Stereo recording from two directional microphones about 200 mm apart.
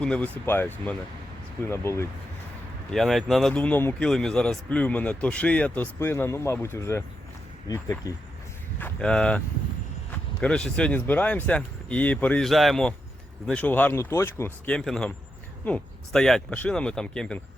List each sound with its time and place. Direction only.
0.0 s a man's voice: 5° left (ahead or behind)
2.9 s a man's voice: centre (ahead or behind); by 8.1 s 20° left (ahead or behind)
8.8 s a man's voice: 5° left (ahead or behind)